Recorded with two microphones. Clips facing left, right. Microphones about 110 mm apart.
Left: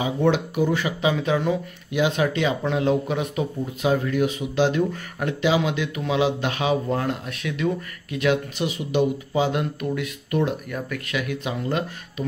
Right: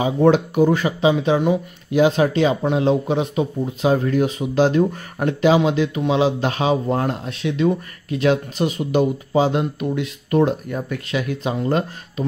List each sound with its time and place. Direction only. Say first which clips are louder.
0.0 s speech: right 6 dB; 40° right (ahead or behind)
1.0 s speech: right 5 dB; 25° right (ahead or behind)
1.9 s speech: right 6 dB; 40° right (ahead or behind)